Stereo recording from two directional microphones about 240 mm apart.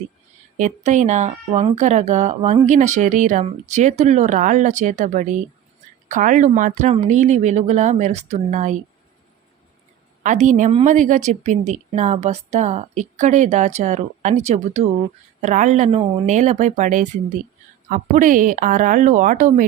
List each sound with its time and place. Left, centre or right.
0.5 s speech: right
10.2 s speech: right